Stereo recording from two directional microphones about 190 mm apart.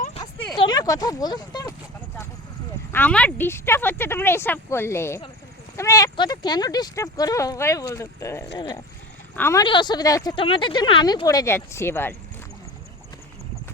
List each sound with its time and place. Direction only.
0.3 s a sound: 5° left (ahead or behind)
0.6 s speech: 20° left (ahead or behind)
2.9 s speech: 10° left (ahead or behind); by 8.8 s 25° left (ahead or behind)
9.3 s speech: 15° left (ahead or behind)
9.6 s speech: 25° left (ahead or behind)